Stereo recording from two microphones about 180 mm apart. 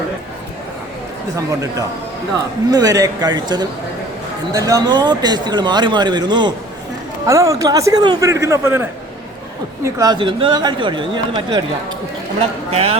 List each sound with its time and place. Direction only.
1.4 s a man's voice: 20° right (ahead or behind)
4.5 s a man's voice: 20° right (ahead or behind)